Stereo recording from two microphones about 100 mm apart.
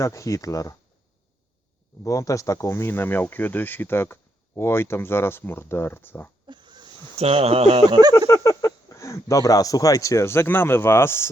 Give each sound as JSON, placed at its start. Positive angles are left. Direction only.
{"t": 0.0, "sound": "speech", "side_deg": 30}
{"t": 2.0, "sound": "speech", "side_deg": 35}
{"t": 6.5, "sound": "a sound", "side_deg": -50}
{"t": 7.2, "sound": "speech", "side_deg": -90}
{"t": 7.9, "sound": "speech", "side_deg": -45}
{"t": 8.3, "sound": "a sound", "side_deg": 30}
{"t": 9.3, "sound": "speech", "side_deg": 35}